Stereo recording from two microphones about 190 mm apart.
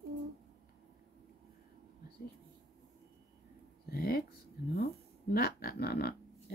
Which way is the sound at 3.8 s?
55° left (ahead or behind).